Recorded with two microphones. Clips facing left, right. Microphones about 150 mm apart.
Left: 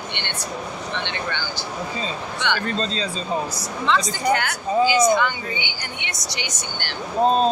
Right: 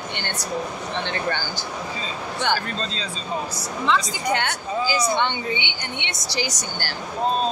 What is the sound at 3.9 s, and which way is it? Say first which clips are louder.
Speech: left 1 dB; centre (ahead or behind).